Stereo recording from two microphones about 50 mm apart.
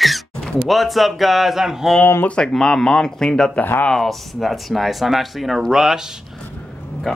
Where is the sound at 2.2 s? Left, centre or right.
Centre.